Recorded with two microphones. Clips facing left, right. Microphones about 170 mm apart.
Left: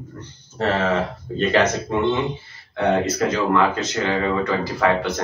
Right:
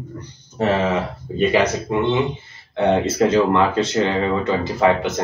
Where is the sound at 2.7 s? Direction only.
25° right (ahead or behind).